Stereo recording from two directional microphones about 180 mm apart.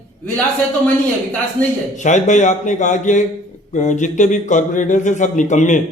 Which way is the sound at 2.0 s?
40° left (ahead or behind).